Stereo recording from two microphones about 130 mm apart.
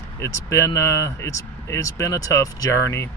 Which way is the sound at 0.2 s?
20° left (ahead or behind).